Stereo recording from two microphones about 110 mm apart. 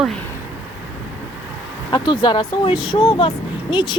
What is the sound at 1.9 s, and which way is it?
Speech, 40° left (ahead or behind).